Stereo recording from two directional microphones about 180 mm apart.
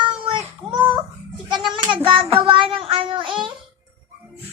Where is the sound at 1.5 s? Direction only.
25° right (ahead or behind).